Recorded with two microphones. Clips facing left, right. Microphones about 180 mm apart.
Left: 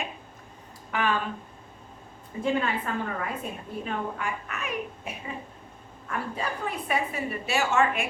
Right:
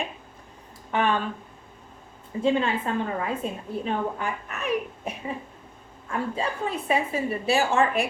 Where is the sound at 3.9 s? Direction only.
35° right (ahead or behind).